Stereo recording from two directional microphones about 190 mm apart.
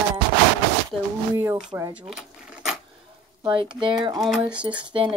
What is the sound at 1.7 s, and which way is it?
Speech, 20° right (ahead or behind).